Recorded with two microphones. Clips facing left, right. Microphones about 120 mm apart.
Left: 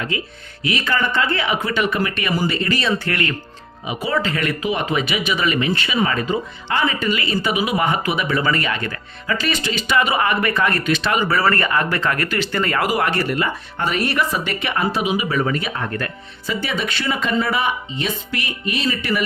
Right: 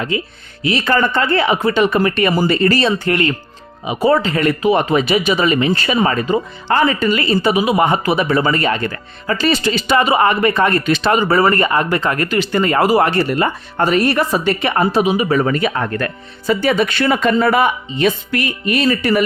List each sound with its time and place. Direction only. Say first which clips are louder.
0.1 s speech: right 5 dB; 30° right (ahead or behind)
3.0 s speech: right 6 dB; 25° right (ahead or behind); by 19.2 s 45° right (ahead or behind)